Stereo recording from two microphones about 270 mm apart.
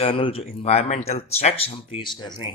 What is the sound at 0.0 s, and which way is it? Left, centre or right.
Speech, left.